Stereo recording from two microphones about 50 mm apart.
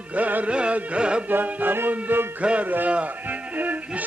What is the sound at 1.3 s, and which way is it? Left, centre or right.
Music, right.